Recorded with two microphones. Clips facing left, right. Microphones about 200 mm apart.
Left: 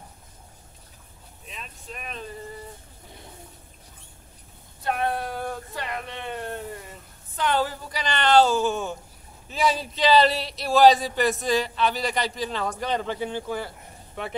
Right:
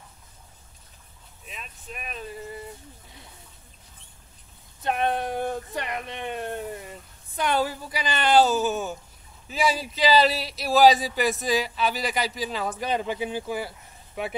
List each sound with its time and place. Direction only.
1.5 s vehicle: 10° right (ahead or behind)
4.8 s a sound: 20° right (ahead or behind)
7.3 s speech: 15° right (ahead or behind)